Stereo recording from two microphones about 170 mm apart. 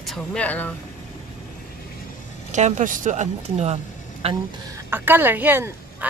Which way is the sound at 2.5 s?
45° right (ahead or behind).